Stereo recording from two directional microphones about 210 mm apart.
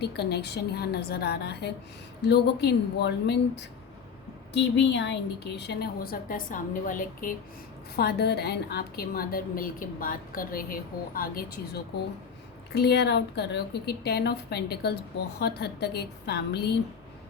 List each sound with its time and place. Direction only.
0.0 s a woman's voice: 50° left (ahead or behind)